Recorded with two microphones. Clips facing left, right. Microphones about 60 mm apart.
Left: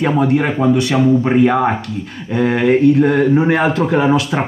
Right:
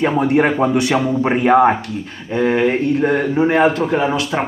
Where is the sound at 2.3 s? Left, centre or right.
Centre.